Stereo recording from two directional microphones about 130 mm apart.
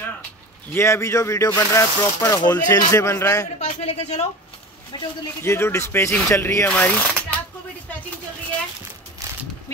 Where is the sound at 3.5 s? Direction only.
60° left (ahead or behind).